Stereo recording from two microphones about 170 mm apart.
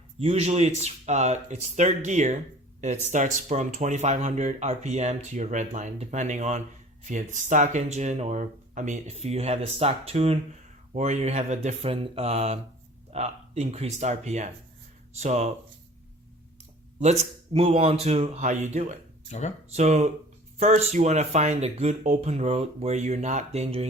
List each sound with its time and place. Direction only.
0.2 s speech: 40° right (ahead or behind)
17.0 s speech: 40° right (ahead or behind)
19.3 s speech: 40° left (ahead or behind)
19.7 s speech: 40° right (ahead or behind)